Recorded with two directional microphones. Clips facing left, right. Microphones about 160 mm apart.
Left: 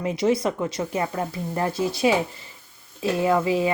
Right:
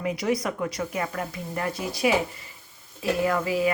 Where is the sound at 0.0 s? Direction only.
25° left (ahead or behind).